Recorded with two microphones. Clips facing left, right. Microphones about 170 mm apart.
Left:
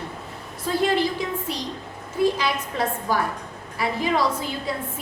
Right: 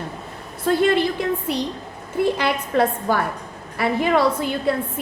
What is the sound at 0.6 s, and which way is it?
A woman's voice, 60° right (ahead or behind).